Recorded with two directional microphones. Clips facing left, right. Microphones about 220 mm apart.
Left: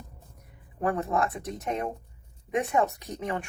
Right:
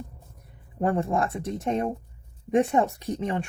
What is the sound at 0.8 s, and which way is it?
Speech, 25° right (ahead or behind).